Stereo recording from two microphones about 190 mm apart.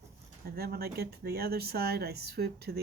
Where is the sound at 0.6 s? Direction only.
55° right (ahead or behind).